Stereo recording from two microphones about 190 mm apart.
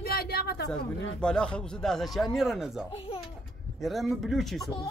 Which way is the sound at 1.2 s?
5° left (ahead or behind).